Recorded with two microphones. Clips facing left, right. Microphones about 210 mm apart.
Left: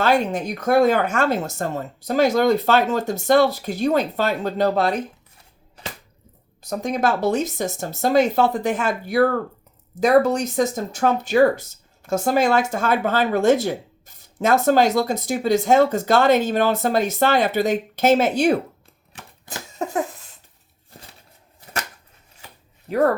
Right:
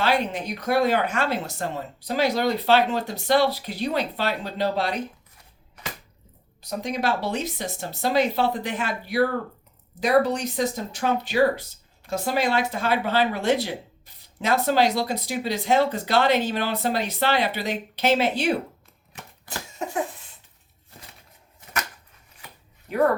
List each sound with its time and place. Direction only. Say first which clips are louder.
0.0 s speech: left 4 dB; 45° left (ahead or behind)
6.6 s speech: left 5 dB; 45° left (ahead or behind)